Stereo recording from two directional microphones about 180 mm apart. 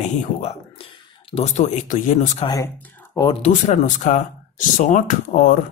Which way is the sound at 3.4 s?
40° left (ahead or behind).